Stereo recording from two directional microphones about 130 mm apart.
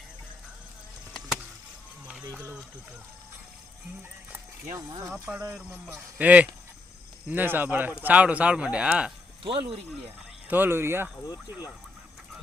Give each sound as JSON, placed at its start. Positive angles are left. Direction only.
{"t": 2.3, "sound": "speech", "side_deg": -15}
{"t": 4.9, "sound": "speech", "side_deg": -25}
{"t": 9.4, "sound": "speech", "side_deg": -40}
{"t": 10.5, "sound": "speech", "side_deg": -15}